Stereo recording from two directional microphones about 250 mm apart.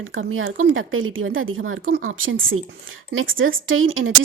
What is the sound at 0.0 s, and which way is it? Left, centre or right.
A woman's voice, right.